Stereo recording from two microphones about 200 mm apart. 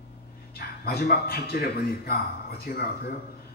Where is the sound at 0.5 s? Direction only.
50° left (ahead or behind).